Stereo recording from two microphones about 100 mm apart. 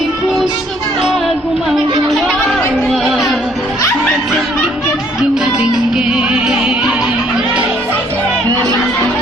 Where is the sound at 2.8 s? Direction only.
Centre (ahead or behind).